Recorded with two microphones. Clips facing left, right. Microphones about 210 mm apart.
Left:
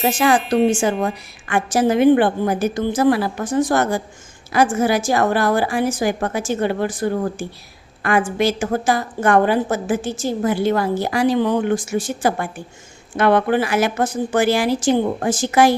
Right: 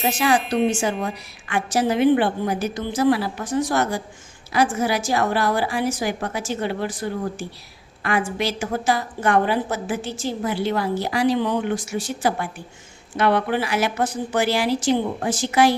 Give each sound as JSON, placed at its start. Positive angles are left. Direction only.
{"t": 0.2, "sound": "a woman's voice", "side_deg": 45}